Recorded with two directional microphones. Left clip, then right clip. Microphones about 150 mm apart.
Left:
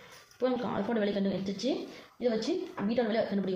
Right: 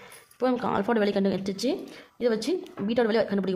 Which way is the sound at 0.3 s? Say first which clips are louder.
Right 5 dB; 55° right (ahead or behind).